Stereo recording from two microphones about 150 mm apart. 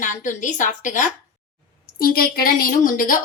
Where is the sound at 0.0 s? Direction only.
55° left (ahead or behind).